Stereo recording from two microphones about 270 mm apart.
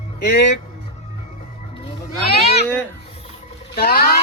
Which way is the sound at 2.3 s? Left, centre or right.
Left.